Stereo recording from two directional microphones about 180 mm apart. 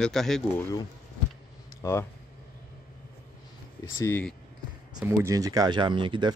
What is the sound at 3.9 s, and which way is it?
Speech, 15° left (ahead or behind).